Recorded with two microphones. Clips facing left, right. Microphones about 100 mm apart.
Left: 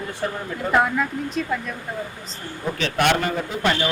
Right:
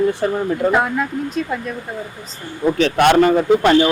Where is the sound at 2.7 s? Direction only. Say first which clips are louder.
Right 8 dB; 40° right (ahead or behind).